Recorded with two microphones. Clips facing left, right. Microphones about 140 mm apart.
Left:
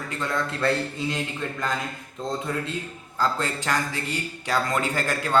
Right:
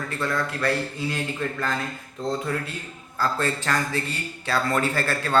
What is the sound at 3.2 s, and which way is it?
A man's voice, 15° left (ahead or behind).